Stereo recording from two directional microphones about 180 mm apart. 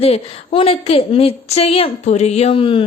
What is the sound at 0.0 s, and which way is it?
A woman's voice, 35° left (ahead or behind).